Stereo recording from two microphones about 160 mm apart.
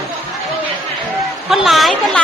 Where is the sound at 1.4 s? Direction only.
Centre (ahead or behind).